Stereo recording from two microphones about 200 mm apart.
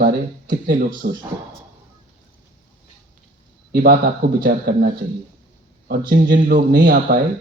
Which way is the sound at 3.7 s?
45° right (ahead or behind).